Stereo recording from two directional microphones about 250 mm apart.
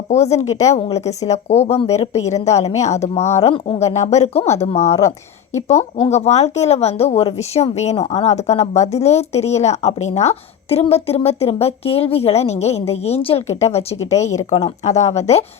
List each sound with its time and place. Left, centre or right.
0.1 s speech: left
4.9 s speech: centre
5.6 s speech: left